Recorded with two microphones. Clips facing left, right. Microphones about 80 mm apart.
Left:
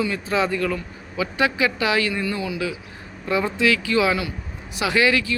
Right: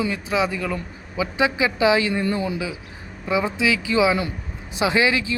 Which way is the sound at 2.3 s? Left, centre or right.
Right.